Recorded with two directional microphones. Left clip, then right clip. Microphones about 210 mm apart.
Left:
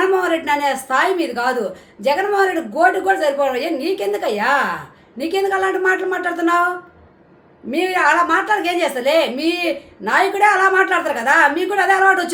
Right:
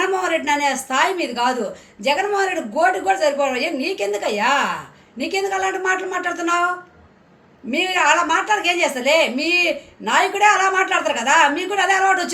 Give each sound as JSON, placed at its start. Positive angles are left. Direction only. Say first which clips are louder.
{"t": 0.1, "sound": "a woman's voice", "louder": "left 2 dB", "side_deg": 15}
{"t": 7.7, "sound": "a woman's voice", "louder": "left 1 dB", "side_deg": 15}